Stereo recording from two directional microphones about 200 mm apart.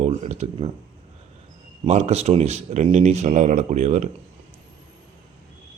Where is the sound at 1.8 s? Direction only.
35° right (ahead or behind).